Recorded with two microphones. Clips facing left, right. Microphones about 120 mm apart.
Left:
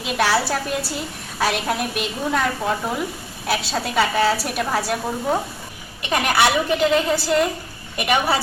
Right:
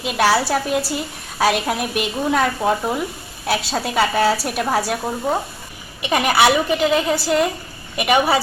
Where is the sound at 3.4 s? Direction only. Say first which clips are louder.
Right 2 dB; centre (ahead or behind).